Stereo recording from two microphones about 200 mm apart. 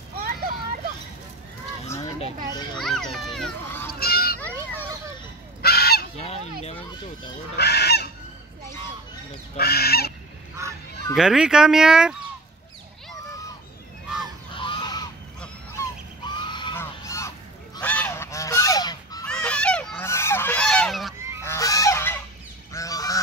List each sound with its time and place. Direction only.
0.2 s a sound: 45° right (ahead or behind)
2.8 s a sound: centre (ahead or behind)
4.0 s a sound: 50° left (ahead or behind)
5.6 s honk: 50° left (ahead or behind)
6.1 s goose: 30° left (ahead or behind)
7.5 s goose: 55° left (ahead or behind)
9.6 s goose: 50° left (ahead or behind)
11.1 s speech: 5° right (ahead or behind)
14.5 s goose: 25° left (ahead or behind)
16.3 s honk: 25° left (ahead or behind)
16.7 s goose: 15° left (ahead or behind)
19.2 s honk: 5° left (ahead or behind)
21.5 s goose: 15° left (ahead or behind)